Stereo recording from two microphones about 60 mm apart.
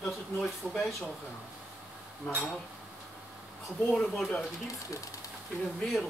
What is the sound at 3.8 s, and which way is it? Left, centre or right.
Speech, centre.